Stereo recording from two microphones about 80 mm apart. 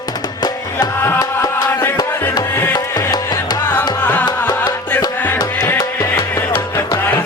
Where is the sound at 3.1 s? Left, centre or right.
Left.